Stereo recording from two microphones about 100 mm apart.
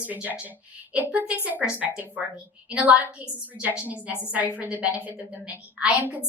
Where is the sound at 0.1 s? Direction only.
15° right (ahead or behind).